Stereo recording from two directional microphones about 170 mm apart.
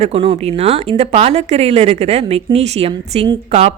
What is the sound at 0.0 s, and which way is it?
Speech, 35° right (ahead or behind).